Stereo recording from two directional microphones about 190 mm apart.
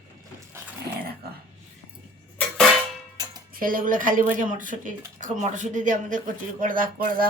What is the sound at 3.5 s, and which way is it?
Speech, 45° right (ahead or behind).